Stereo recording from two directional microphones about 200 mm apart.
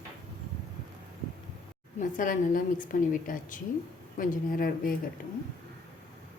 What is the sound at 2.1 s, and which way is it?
A woman's voice, 40° left (ahead or behind).